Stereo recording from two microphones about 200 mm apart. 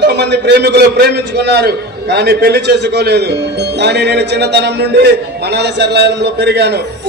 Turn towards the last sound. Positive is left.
turn(degrees=-55)  # may be behind; listen again after turning